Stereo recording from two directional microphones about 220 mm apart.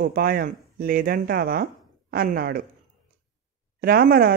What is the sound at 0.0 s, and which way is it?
Speech, 40° right (ahead or behind).